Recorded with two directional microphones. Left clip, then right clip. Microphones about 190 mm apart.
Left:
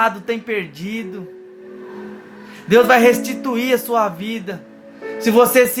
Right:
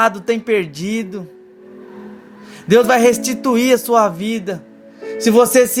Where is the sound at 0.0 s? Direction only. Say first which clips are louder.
Right 3 dB; 55° right (ahead or behind).